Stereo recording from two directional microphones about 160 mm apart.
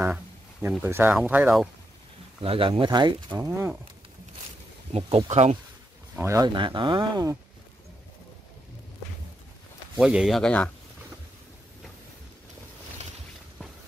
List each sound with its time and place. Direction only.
0.0 s speech: 10° right (ahead or behind)
2.4 s speech: 35° right (ahead or behind)
3.3 s speech: 15° right (ahead or behind)
4.9 s speech: 40° right (ahead or behind)
6.1 s a man's voice: 20° right (ahead or behind)
6.5 s speech: 30° right (ahead or behind)
9.9 s speech: 5° right (ahead or behind)